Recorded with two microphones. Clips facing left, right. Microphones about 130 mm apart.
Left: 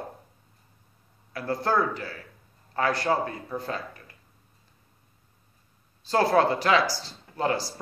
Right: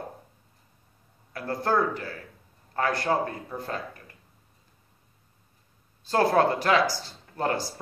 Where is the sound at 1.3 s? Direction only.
50° right (ahead or behind).